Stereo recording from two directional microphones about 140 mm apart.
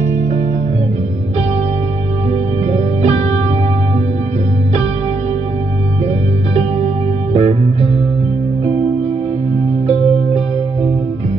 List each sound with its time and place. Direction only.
2.7 s music: 55° right (ahead or behind)
7.3 s music: 50° right (ahead or behind)